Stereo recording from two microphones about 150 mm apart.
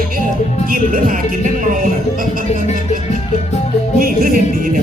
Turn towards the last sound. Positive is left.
turn(degrees=-65)  # may be behind; listen again after turning